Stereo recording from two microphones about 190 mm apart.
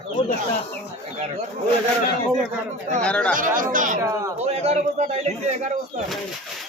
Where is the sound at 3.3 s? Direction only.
45° right (ahead or behind).